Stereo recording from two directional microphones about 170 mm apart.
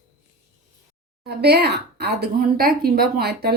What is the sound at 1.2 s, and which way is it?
Speech, 70° right (ahead or behind).